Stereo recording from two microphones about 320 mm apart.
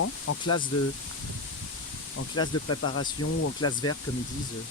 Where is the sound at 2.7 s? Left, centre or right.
Left.